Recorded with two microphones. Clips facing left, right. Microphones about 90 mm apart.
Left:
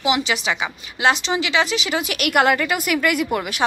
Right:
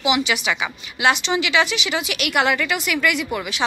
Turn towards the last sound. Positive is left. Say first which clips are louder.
# left 3 dB
turn(degrees=45)  # may be behind; listen again after turning